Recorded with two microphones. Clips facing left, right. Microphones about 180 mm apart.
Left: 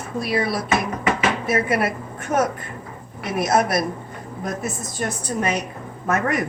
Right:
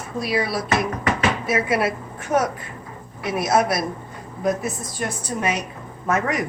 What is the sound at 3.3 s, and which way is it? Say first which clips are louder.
A woman's voice: left 1 dB; 50° left (ahead or behind).